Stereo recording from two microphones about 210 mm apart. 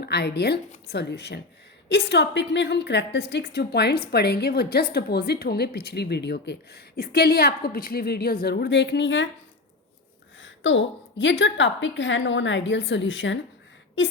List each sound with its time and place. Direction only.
0.0 s a woman's voice: 50° left (ahead or behind)
10.4 s a woman's voice: 60° left (ahead or behind)